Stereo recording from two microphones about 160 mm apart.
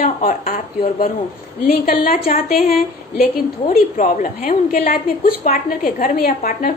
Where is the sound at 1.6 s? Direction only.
70° left (ahead or behind).